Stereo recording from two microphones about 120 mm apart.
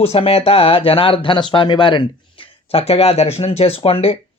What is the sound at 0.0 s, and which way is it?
Speech, 55° left (ahead or behind).